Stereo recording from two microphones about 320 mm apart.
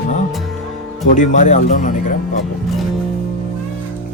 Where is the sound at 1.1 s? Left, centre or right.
Left.